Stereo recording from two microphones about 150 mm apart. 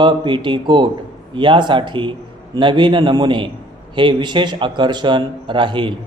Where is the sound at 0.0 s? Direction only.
35° right (ahead or behind).